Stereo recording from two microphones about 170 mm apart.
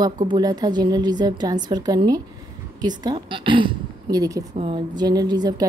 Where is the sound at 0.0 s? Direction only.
25° right (ahead or behind).